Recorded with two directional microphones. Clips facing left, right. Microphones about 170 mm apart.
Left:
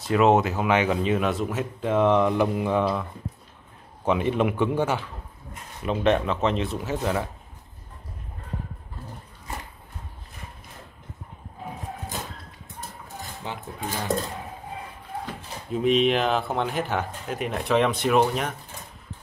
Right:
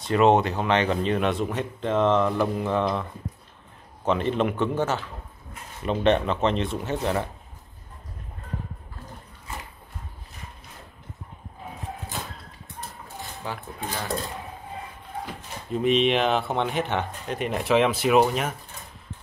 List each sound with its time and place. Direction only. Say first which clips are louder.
0.1 s speech: even; 5° left (ahead or behind)
13.4 s speech: right 1 dB; 20° left (ahead or behind)
15.7 s speech: even; centre (ahead or behind)